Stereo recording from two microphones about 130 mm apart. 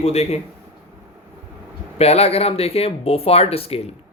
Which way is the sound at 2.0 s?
50° left (ahead or behind).